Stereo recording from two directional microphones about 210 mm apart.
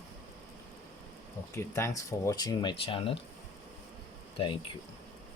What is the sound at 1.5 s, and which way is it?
Speech, 15° left (ahead or behind).